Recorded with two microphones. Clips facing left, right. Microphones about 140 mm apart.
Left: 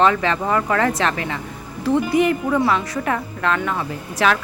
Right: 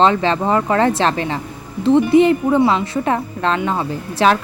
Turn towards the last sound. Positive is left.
turn(degrees=-30)  # may be behind; listen again after turning